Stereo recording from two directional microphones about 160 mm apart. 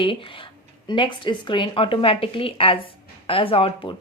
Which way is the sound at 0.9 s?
30° left (ahead or behind).